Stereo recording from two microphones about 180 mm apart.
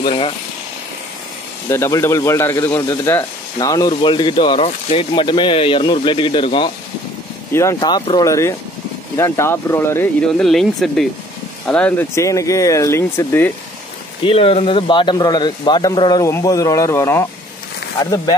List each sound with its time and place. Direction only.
0.0 s speech: 30° left (ahead or behind)
1.7 s speech: 15° left (ahead or behind)
14.2 s speech: 30° left (ahead or behind); by 17.3 s 15° left (ahead or behind)